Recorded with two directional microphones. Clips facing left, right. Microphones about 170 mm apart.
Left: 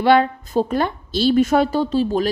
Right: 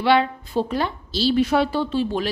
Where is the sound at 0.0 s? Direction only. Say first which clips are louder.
Left 3 dB; 45° left (ahead or behind).